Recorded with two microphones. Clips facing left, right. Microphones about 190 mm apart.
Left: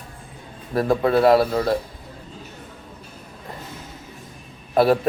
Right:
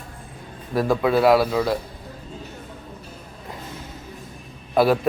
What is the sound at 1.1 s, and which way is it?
Speech, centre (ahead or behind).